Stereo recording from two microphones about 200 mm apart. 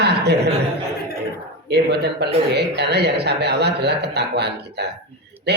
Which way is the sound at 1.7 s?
55° right (ahead or behind).